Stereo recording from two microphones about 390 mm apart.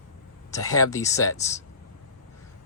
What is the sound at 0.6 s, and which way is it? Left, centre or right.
Speech, centre.